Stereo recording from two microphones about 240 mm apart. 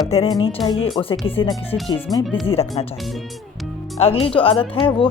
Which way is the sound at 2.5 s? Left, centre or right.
Left.